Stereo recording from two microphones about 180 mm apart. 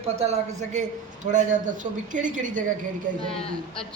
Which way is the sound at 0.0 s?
35° right (ahead or behind).